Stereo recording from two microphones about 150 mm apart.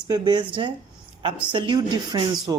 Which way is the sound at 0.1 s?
30° right (ahead or behind).